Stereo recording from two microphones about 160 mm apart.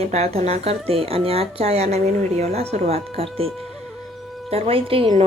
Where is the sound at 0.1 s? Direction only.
40° right (ahead or behind).